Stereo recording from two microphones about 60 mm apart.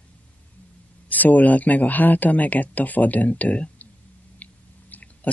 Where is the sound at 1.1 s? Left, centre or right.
Left.